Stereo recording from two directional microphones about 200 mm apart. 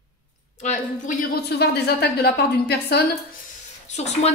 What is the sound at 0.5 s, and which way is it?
Speech, 35° left (ahead or behind).